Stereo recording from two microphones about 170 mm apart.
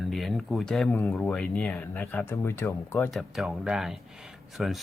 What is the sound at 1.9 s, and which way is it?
Speech, 15° left (ahead or behind).